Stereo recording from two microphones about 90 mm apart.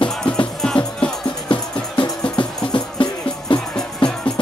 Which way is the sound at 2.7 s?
65° left (ahead or behind).